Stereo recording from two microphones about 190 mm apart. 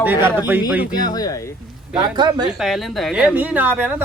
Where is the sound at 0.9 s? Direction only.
20° left (ahead or behind).